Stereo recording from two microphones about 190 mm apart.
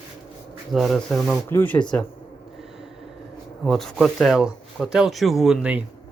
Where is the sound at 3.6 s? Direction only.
Centre (ahead or behind).